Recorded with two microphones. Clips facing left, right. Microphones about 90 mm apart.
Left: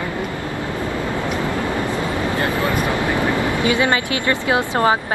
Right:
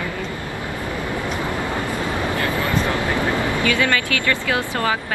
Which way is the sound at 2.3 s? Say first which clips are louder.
Left 2 dB; 20° left (ahead or behind).